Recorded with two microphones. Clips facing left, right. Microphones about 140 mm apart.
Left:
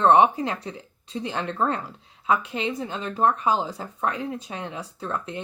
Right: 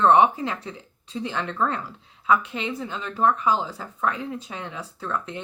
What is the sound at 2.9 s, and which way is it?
Speech, 40° left (ahead or behind).